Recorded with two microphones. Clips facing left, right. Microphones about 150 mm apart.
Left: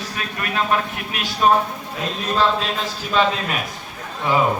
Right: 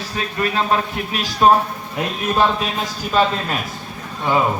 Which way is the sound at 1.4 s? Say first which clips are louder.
Right 3 dB; 40° right (ahead or behind).